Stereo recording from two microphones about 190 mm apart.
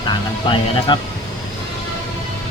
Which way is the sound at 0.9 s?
25° left (ahead or behind).